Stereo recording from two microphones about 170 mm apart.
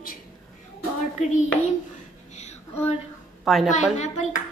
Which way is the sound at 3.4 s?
Centre (ahead or behind).